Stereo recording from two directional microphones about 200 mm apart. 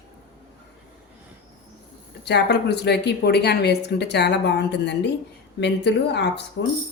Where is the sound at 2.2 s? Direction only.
55° left (ahead or behind).